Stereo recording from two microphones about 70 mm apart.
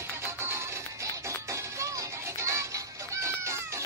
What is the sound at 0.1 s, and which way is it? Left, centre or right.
Music, right.